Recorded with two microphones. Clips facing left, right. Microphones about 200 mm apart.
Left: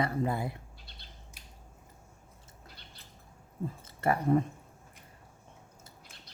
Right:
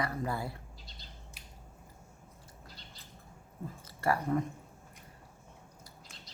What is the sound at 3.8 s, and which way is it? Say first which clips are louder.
Speech: left 2 dB; 25° left (ahead or behind).